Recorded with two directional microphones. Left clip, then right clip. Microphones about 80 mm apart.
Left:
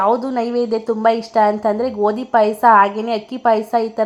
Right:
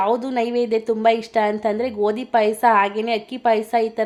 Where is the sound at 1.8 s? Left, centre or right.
Left.